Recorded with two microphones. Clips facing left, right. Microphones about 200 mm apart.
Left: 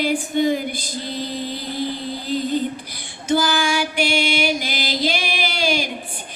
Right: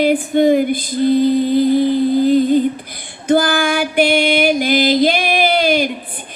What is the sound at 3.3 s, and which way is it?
Music, 55° right (ahead or behind).